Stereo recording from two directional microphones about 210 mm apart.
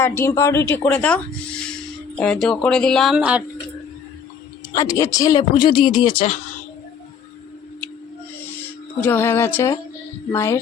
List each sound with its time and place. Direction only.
0.0 s speech: 10° left (ahead or behind); by 3.4 s 5° right (ahead or behind)
4.7 s speech: 15° left (ahead or behind)
9.0 s speech: 10° left (ahead or behind)